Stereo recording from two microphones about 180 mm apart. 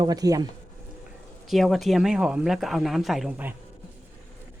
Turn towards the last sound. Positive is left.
turn(degrees=-5)  # may be behind; listen again after turning